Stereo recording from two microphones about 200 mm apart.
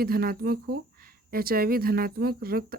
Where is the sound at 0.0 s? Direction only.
50° right (ahead or behind).